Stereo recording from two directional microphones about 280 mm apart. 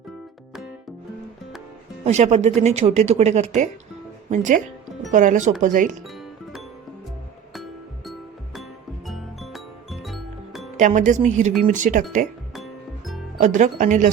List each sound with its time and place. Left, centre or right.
2.0 s speech: right
6.0 s music: centre
10.8 s speech: right
12.5 s music: centre
13.4 s speech: right